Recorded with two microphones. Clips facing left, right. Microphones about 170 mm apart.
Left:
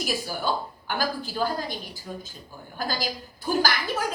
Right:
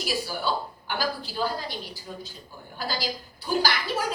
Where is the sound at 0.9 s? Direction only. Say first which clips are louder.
Left 2 dB; 45° left (ahead or behind).